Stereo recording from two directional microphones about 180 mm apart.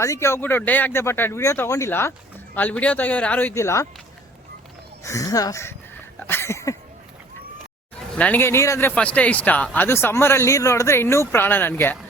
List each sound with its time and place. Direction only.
0.0 s speech: 15° left (ahead or behind)
5.0 s speech: 20° left (ahead or behind)
6.2 s a sound: 15° left (ahead or behind)
8.1 s speech: 10° left (ahead or behind)